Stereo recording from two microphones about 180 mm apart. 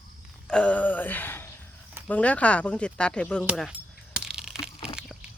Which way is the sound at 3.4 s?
5° right (ahead or behind).